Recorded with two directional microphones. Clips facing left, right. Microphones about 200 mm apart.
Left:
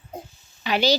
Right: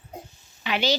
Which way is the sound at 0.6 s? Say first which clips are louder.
Left 4 dB; 40° left (ahead or behind).